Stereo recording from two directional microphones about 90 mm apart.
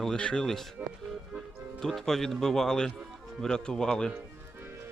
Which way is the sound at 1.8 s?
5° left (ahead or behind).